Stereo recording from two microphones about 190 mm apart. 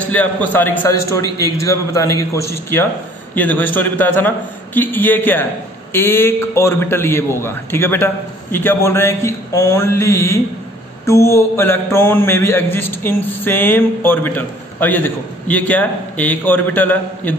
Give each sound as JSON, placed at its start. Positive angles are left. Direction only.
{"t": 0.1, "sound": "mantra", "side_deg": 10}